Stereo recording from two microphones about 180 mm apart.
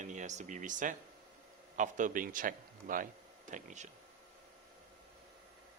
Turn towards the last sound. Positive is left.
turn(degrees=-40)  # may be behind; listen again after turning